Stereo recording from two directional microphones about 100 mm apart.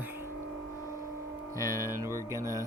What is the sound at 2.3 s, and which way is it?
Music, 30° right (ahead or behind).